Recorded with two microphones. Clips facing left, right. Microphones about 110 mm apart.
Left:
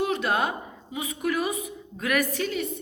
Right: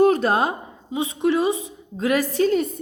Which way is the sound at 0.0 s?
40° right (ahead or behind).